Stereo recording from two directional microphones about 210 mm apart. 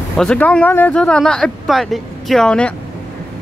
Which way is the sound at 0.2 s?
5° left (ahead or behind).